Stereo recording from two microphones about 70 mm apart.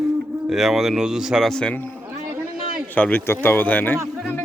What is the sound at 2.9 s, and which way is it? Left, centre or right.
Speech, left.